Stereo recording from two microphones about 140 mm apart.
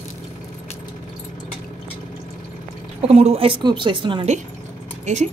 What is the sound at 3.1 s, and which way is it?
A woman's voice, 45° right (ahead or behind).